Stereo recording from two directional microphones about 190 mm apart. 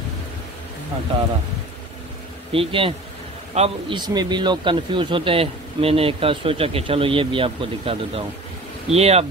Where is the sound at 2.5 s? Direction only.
30° right (ahead or behind).